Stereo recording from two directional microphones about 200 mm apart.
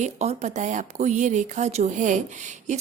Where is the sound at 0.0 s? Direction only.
35° right (ahead or behind).